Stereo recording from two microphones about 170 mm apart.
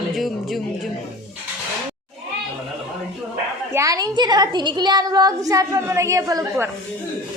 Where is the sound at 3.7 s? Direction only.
20° right (ahead or behind).